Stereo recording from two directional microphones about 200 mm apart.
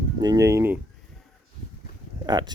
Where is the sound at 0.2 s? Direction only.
20° right (ahead or behind).